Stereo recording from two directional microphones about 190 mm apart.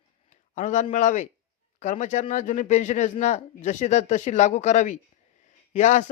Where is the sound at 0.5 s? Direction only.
40° left (ahead or behind).